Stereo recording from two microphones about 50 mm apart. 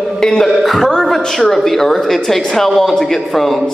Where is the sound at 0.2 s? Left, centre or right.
Centre.